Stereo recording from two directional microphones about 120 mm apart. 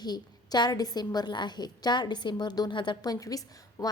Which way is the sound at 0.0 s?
35° left (ahead or behind).